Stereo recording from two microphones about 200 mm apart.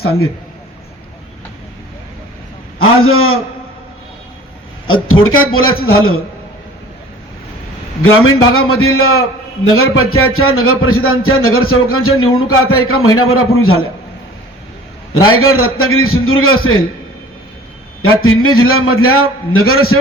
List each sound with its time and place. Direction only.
2.7 s a sound: 90° left
5.0 s a man's voice: 90° left
8.0 s a man's voice: 90° left
15.1 s a man's voice: 90° left
18.0 s a man's voice: 90° left